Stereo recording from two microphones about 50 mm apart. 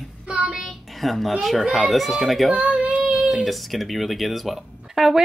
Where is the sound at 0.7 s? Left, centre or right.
Centre.